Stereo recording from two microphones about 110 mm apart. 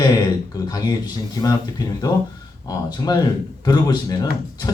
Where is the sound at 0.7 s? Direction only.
40° left (ahead or behind).